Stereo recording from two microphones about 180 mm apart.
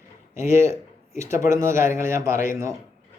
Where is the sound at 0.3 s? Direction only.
15° right (ahead or behind).